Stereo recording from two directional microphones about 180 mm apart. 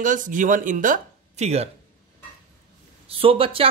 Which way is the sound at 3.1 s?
30° right (ahead or behind).